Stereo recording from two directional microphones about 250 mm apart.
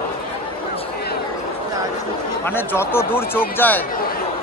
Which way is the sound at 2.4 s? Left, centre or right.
Centre.